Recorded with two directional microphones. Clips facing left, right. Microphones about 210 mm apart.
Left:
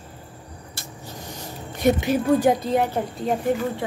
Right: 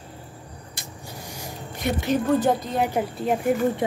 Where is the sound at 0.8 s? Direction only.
10° right (ahead or behind).